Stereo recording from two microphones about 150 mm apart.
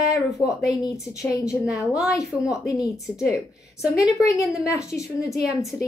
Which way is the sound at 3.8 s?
Centre (ahead or behind).